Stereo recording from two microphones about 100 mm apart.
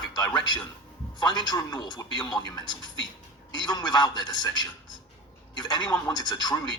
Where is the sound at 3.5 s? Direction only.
45° left (ahead or behind).